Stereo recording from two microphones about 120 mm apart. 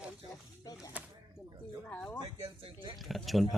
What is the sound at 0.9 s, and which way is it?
Speech, 15° right (ahead or behind).